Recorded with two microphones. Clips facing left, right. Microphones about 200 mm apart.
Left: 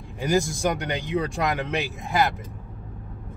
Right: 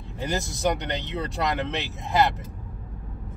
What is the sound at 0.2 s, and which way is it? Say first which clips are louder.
Speech: left 4 dB; 10° left (ahead or behind).